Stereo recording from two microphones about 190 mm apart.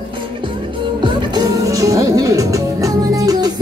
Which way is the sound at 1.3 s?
15° right (ahead or behind).